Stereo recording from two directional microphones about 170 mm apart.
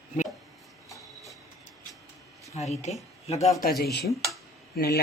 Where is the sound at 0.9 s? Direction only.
Centre (ahead or behind).